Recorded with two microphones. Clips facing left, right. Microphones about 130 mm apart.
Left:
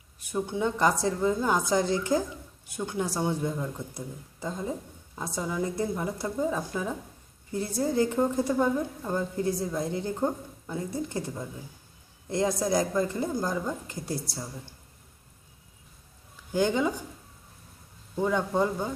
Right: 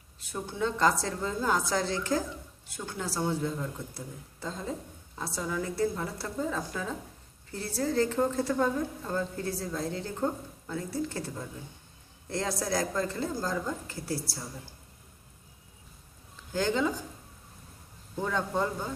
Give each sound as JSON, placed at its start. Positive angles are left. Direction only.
{"t": 0.2, "sound": "a woman's voice", "side_deg": 15}
{"t": 16.5, "sound": "speech", "side_deg": 15}
{"t": 18.2, "sound": "a woman's voice", "side_deg": 15}